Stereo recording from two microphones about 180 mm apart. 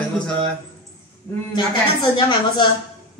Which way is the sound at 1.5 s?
25° left (ahead or behind).